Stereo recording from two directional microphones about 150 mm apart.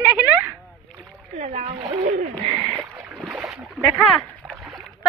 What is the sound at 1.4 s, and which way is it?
Speech, 45° right (ahead or behind).